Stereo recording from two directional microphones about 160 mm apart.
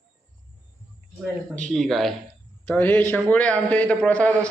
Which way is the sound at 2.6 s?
10° left (ahead or behind).